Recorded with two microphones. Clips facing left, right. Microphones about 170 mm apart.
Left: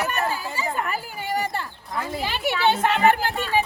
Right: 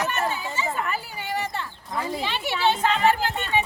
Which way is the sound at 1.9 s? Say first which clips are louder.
Even; centre (ahead or behind).